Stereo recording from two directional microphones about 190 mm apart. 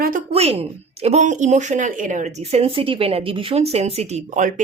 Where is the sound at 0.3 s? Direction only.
30° right (ahead or behind).